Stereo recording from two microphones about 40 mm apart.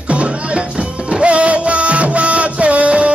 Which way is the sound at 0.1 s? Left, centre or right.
Right.